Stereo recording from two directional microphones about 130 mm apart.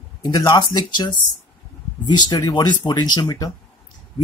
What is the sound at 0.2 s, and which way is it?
Speech, 35° left (ahead or behind).